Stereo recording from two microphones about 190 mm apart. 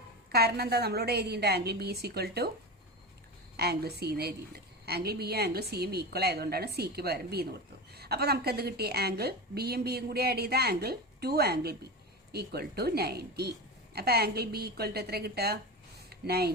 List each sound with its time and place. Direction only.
0.3 s a woman's voice: 55° right (ahead or behind)
3.6 s a woman's voice: 55° right (ahead or behind)
16.0 s a sound: 55° right (ahead or behind)